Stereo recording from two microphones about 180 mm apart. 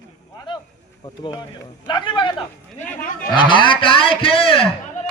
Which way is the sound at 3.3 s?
25° left (ahead or behind).